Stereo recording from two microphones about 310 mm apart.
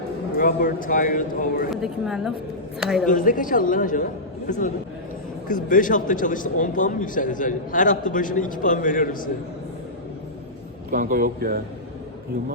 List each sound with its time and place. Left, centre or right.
0.3 s speech: left
1.7 s a woman's voice: centre
3.1 s speech: left
10.9 s speech: right